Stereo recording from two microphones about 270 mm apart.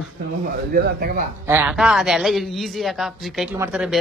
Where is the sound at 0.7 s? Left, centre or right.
Right.